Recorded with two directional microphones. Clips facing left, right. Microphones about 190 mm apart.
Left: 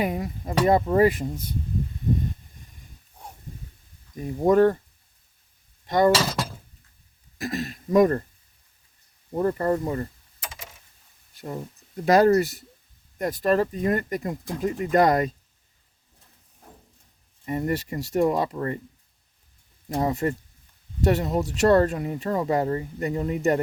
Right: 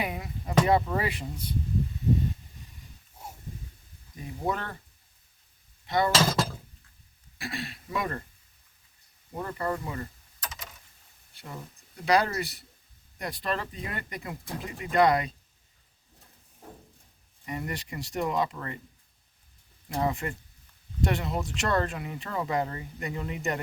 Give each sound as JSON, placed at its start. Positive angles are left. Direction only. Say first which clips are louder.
{"t": 0.0, "sound": "speech", "louder": "left 7 dB", "side_deg": 40}
{"t": 4.1, "sound": "speech", "louder": "left 12 dB", "side_deg": 45}
{"t": 5.8, "sound": "speech", "louder": "left 6 dB", "side_deg": 45}
{"t": 7.3, "sound": "speech", "louder": "left 7 dB", "side_deg": 40}
{"t": 9.3, "sound": "speech", "louder": "left 9 dB", "side_deg": 40}
{"t": 11.3, "sound": "speech", "louder": "left 9 dB", "side_deg": 40}
{"t": 17.4, "sound": "speech", "louder": "left 9 dB", "side_deg": 40}
{"t": 19.9, "sound": "speech", "louder": "left 5 dB", "side_deg": 40}